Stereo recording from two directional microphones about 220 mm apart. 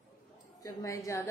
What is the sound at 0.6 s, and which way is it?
Speech, 15° left (ahead or behind).